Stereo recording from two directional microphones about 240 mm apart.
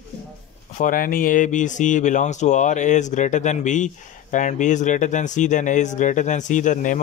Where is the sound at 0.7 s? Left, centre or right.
Left.